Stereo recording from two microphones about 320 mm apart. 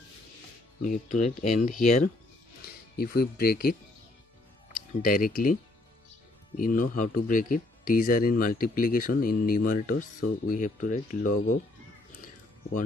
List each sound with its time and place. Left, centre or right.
0.8 s speech: left
5.0 s speech: left